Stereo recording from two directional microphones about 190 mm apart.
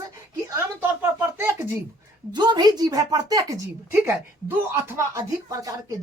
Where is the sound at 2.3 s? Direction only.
25° right (ahead or behind).